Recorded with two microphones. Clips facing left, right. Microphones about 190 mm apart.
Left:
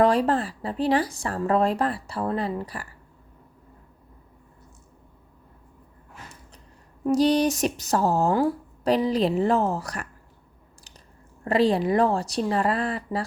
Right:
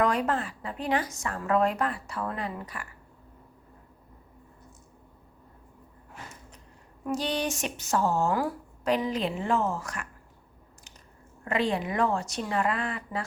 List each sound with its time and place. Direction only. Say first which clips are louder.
0.0 s speech: left 6 dB; 35° left (ahead or behind)
7.0 s speech: left 9 dB; 40° left (ahead or behind)
11.4 s speech: left 7 dB; 35° left (ahead or behind)